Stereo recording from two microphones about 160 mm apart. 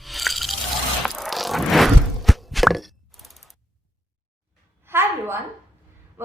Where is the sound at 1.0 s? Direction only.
Centre (ahead or behind).